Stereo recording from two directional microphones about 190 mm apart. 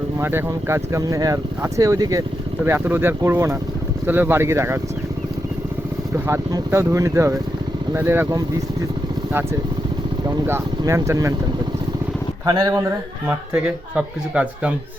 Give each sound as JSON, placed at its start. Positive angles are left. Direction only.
{"t": 0.2, "sound": "a man's voice", "side_deg": -10}
{"t": 6.1, "sound": "a man's voice", "side_deg": -15}
{"t": 10.2, "sound": "a man's voice", "side_deg": -15}
{"t": 12.5, "sound": "a man's voice", "side_deg": -20}